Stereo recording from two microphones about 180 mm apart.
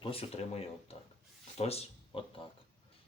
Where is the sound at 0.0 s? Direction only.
30° left (ahead or behind).